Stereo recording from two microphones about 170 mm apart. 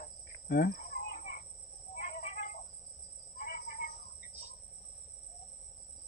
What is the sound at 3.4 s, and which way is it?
Cricket, 50° left (ahead or behind).